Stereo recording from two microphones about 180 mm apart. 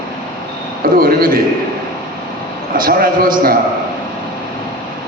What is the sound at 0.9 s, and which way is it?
Speech, 55° right (ahead or behind).